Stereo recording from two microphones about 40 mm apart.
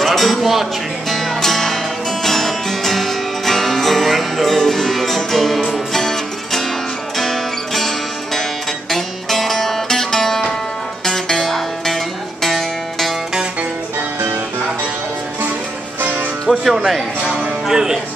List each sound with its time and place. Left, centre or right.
0.0 s speech: centre
1.0 s music: centre
8.9 s music: centre
16.4 s speech: centre
17.2 s music: right
17.6 s speech: centre